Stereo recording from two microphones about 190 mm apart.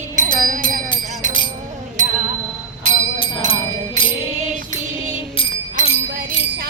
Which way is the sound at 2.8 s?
25° left (ahead or behind).